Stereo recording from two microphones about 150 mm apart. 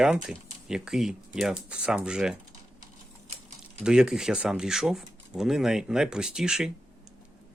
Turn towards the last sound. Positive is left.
turn(degrees=-5)  # may be behind; listen again after turning